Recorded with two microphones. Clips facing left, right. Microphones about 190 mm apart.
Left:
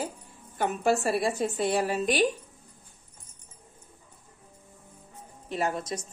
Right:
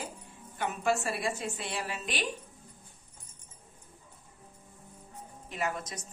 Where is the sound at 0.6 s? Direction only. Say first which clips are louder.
Left 5 dB; 35° left (ahead or behind).